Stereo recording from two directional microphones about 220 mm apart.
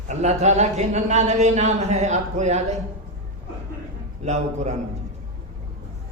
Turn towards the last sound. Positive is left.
turn(degrees=-30)  # may be behind; listen again after turning